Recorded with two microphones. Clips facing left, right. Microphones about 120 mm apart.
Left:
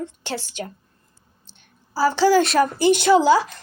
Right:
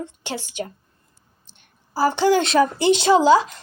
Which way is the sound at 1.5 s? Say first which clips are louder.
Even; 55° right (ahead or behind).